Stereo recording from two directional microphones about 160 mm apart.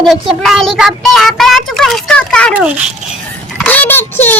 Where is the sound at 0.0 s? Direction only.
Centre (ahead or behind).